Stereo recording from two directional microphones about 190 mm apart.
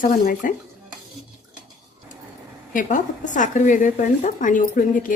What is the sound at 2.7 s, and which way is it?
A woman's voice, 40° left (ahead or behind).